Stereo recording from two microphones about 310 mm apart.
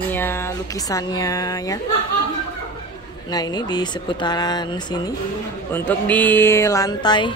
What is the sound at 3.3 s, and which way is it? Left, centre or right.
Speech, centre.